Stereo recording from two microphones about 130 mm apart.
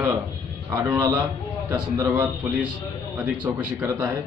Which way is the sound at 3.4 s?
15° right (ahead or behind).